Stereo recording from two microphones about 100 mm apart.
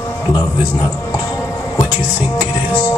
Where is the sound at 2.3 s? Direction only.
45° left (ahead or behind).